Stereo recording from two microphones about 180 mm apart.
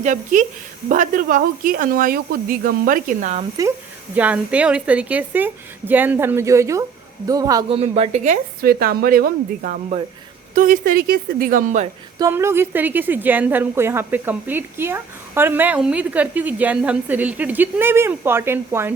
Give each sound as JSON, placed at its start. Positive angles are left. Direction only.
{"t": 0.0, "sound": "speech", "side_deg": -45}
{"t": 4.1, "sound": "a woman's voice", "side_deg": -10}
{"t": 7.7, "sound": "a woman's voice", "side_deg": -35}
{"t": 8.6, "sound": "speech", "side_deg": -55}
{"t": 12.2, "sound": "a woman's voice", "side_deg": -15}